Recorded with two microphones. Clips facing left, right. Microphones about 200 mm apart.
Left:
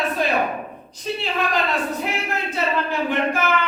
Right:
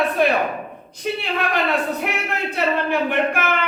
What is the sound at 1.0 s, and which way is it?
Speech, 60° right (ahead or behind).